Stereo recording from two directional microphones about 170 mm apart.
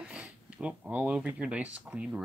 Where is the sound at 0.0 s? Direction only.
5° right (ahead or behind).